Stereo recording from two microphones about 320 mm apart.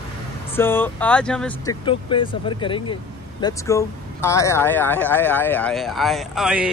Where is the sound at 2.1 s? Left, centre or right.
Centre.